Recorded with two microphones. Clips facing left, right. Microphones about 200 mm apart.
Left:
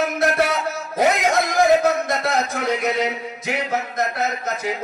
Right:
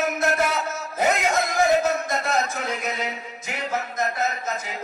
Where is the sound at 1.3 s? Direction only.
65° left (ahead or behind).